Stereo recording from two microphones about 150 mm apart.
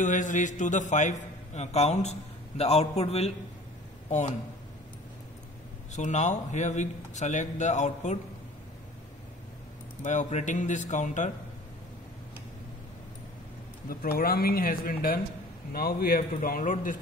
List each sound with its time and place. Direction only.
0.0 s a man's voice: 55° left (ahead or behind)
5.9 s a man's voice: 50° left (ahead or behind)
10.0 s a man's voice: 55° left (ahead or behind)
13.8 s speech: 80° left
15.7 s speech: 85° left; by 17.0 s 60° left (ahead or behind)